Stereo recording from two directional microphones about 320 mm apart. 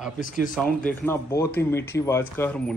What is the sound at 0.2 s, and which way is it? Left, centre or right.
Speech, left.